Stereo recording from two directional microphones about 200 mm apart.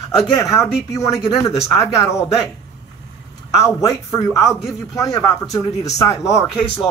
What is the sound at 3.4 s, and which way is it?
A man's voice, 15° left (ahead or behind).